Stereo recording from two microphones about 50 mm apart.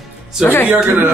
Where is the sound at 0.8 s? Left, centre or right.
Right.